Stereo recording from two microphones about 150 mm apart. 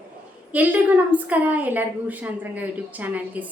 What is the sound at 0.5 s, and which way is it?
A woman's voice, 10° right (ahead or behind).